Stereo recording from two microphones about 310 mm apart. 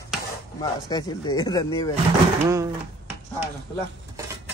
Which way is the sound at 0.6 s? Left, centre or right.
Centre.